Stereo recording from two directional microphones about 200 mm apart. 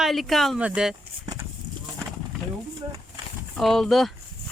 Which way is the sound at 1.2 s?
20° right (ahead or behind).